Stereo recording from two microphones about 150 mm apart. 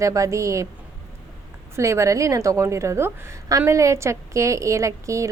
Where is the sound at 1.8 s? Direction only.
20° right (ahead or behind).